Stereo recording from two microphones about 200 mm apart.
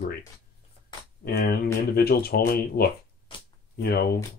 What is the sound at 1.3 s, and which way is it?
Speech, 50° left (ahead or behind).